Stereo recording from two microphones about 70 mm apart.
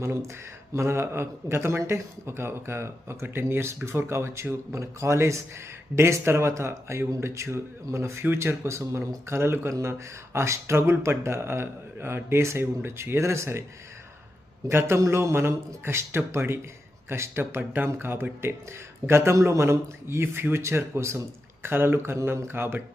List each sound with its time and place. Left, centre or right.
0.0 s speech: right
14.7 s speech: right